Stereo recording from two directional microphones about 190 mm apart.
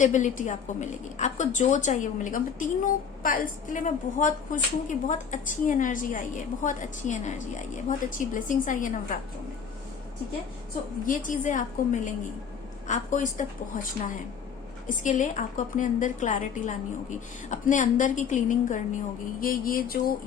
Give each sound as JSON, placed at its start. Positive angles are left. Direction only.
{"t": 0.0, "sound": "a woman's voice", "side_deg": 40}
{"t": 11.0, "sound": "a woman's voice", "side_deg": 45}